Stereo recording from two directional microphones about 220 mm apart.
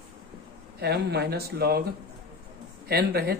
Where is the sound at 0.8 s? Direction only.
50° right (ahead or behind).